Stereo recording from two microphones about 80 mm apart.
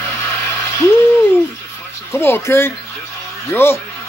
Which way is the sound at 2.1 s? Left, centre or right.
Left.